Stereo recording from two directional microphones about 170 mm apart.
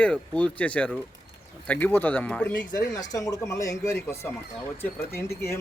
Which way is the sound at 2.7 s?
20° left (ahead or behind).